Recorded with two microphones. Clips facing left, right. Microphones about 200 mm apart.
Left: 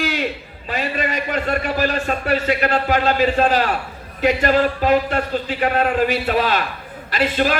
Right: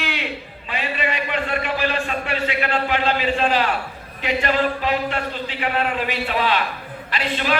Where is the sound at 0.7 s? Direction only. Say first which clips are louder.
Left 3 dB; 40° left (ahead or behind).